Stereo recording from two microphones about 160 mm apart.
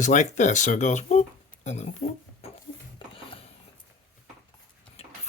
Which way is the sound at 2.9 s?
35° left (ahead or behind).